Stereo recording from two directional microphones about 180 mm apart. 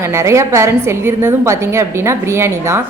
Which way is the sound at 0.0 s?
15° right (ahead or behind).